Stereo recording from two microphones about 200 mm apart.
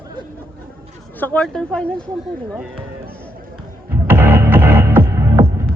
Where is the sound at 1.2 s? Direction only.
5° left (ahead or behind).